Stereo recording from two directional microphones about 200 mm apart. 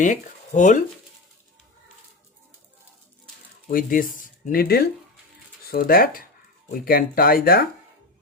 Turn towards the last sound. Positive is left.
turn(degrees=50)  # may be behind; listen again after turning